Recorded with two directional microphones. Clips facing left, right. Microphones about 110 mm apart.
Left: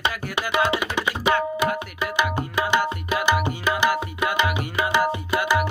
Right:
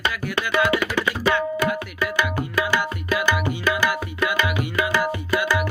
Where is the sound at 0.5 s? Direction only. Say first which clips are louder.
Right 2 dB; 20° left (ahead or behind).